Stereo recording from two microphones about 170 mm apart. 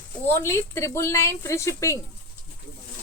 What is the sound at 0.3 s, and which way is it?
Speech, 15° left (ahead or behind).